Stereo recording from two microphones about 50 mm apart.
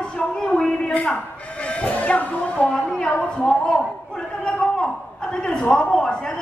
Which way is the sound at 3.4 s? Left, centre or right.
Centre.